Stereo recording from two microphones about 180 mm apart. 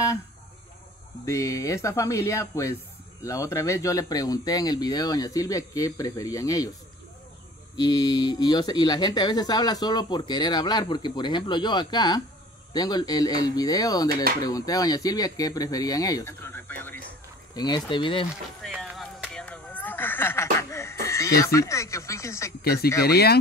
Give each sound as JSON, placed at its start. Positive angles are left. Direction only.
{"t": 1.2, "sound": "speech", "side_deg": 15}
{"t": 7.7, "sound": "speech", "side_deg": 25}
{"t": 17.6, "sound": "speech", "side_deg": 25}
{"t": 18.6, "sound": "a sound", "side_deg": 0}
{"t": 22.6, "sound": "speech", "side_deg": 60}